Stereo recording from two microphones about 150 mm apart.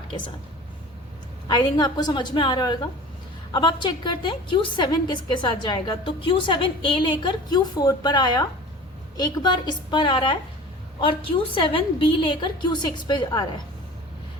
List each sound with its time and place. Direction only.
1.5 s a woman's voice: 25° left (ahead or behind)